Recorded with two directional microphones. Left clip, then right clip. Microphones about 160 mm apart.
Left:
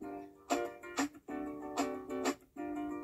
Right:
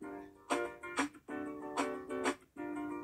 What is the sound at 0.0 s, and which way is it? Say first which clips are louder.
Music: left 2 dB; 10° left (ahead or behind).